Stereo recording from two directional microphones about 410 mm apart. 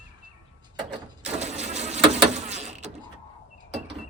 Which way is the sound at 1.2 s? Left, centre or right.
Centre.